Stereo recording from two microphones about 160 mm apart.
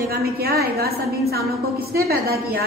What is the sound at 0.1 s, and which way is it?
A woman's voice, 75° right (ahead or behind).